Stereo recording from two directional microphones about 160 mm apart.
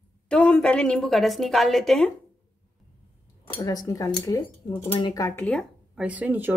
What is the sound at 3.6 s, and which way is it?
Speech, 20° left (ahead or behind).